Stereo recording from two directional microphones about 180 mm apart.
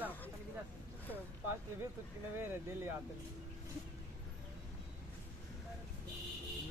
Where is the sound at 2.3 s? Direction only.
15° right (ahead or behind).